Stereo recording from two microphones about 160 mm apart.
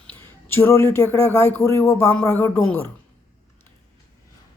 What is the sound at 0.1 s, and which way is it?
Speech, 15° left (ahead or behind).